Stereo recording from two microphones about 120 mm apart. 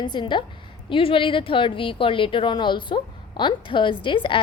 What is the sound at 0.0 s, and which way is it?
A woman's voice, 40° left (ahead or behind).